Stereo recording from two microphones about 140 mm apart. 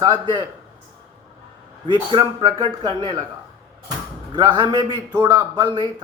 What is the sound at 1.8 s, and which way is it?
A man's voice, 35° right (ahead or behind).